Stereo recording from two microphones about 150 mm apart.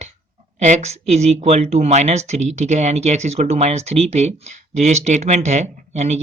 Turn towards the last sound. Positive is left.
turn(degrees=-45)  # may be behind; listen again after turning